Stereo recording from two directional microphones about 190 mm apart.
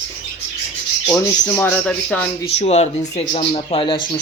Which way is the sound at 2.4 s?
35° left (ahead or behind).